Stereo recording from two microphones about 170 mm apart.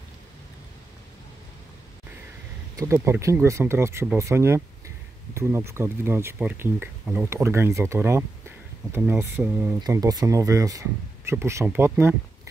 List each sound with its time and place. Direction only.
2.7 s speech: 15° right (ahead or behind)